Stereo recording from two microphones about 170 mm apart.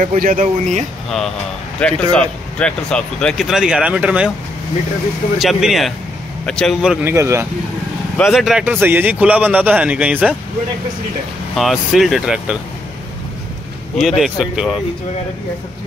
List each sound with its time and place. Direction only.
0.0 s speech: 50° right (ahead or behind)
1.8 s speech: 5° left (ahead or behind)
5.4 s speech: centre (ahead or behind); by 7.4 s 15° right (ahead or behind)
8.2 s a man's voice: centre (ahead or behind)
11.5 s speech: centre (ahead or behind)
13.9 s speech: centre (ahead or behind)